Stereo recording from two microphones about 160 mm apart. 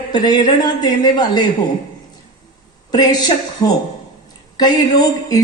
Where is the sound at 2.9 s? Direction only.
25° left (ahead or behind).